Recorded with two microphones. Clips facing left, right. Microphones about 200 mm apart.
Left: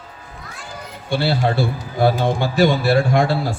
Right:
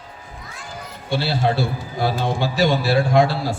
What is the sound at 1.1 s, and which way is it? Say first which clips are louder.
A man's voice: left 2 dB; 55° left (ahead or behind).